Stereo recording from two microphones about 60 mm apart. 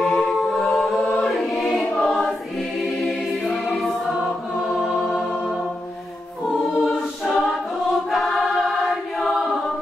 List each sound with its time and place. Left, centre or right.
0.0 s a capella: centre
1.2 s music: centre
1.6 s choir: centre
5.1 s music: centre
6.8 s choir: centre